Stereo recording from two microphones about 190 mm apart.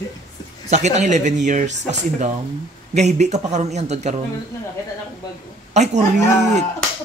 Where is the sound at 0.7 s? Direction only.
35° right (ahead or behind).